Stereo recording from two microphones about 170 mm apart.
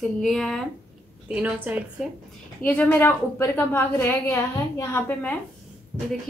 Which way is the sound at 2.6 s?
10° left (ahead or behind).